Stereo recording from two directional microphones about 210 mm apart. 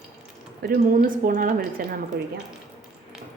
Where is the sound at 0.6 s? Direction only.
45° right (ahead or behind).